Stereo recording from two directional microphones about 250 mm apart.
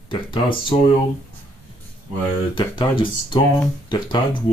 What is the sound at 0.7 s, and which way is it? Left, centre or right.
Speech, centre.